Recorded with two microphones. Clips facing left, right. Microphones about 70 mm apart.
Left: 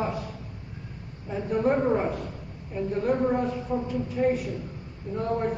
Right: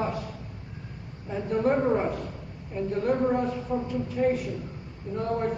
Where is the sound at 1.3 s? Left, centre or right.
Centre.